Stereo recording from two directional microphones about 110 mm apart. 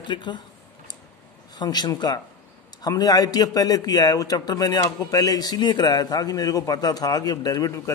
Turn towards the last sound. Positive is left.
turn(degrees=35)  # may be behind; listen again after turning